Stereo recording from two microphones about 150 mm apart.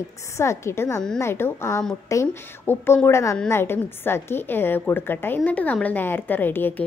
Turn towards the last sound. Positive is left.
turn(degrees=15)  # may be behind; listen again after turning